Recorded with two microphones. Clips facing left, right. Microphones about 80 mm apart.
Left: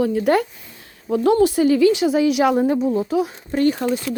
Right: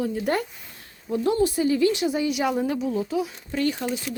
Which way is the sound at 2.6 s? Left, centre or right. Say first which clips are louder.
Left 7 dB; left.